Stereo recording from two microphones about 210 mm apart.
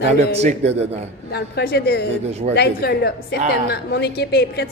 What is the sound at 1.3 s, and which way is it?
Speech, 50° left (ahead or behind).